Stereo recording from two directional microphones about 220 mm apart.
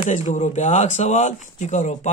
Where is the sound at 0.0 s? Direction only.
35° left (ahead or behind).